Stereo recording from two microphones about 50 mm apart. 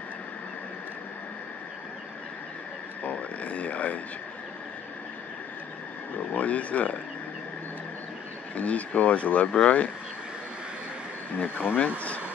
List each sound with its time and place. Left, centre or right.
3.0 s speech: left
6.1 s speech: left
8.5 s speech: left
11.3 s speech: left